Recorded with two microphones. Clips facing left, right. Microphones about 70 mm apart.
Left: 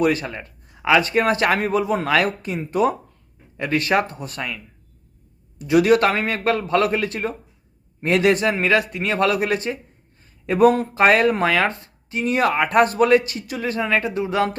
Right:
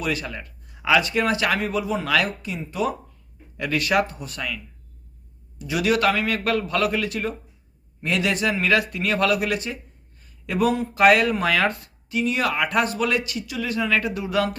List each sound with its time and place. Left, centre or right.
0.0 s speech: left
3.6 s speech: left